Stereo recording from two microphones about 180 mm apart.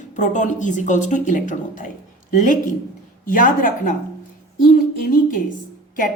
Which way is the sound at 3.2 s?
50° left (ahead or behind).